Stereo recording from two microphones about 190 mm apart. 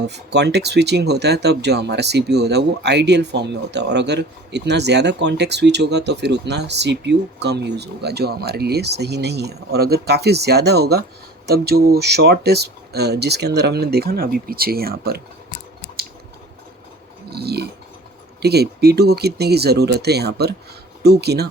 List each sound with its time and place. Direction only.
0.0 s speech: 60° right (ahead or behind)
17.2 s a sound: 55° right (ahead or behind)
18.4 s speech: 60° right (ahead or behind)